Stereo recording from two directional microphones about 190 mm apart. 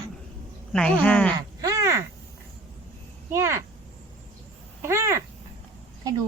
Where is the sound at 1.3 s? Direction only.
15° right (ahead or behind).